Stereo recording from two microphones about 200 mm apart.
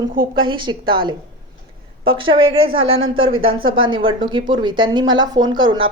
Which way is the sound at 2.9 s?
90° right.